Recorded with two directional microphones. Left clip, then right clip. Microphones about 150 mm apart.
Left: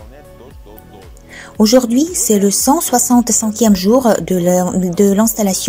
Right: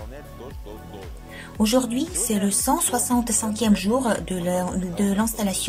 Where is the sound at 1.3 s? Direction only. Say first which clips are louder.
Left 10 dB; 35° left (ahead or behind).